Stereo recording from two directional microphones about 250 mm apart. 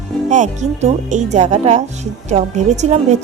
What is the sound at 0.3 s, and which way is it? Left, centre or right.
Speech, right.